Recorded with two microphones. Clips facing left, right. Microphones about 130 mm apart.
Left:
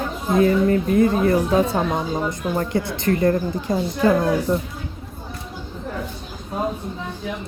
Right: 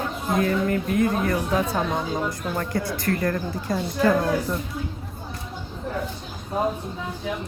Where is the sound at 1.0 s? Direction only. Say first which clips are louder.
Left 5 dB; 30° left (ahead or behind).